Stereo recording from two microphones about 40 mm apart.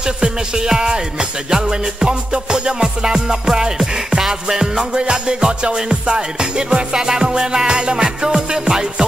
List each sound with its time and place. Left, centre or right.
0.0 s speech: centre
1.5 s music: centre
8.0 s speech: centre